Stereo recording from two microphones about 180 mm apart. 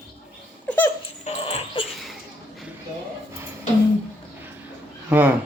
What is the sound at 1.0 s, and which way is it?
Dog, 35° left (ahead or behind).